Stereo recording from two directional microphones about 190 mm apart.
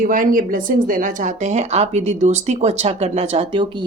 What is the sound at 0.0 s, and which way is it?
Speech, 45° right (ahead or behind).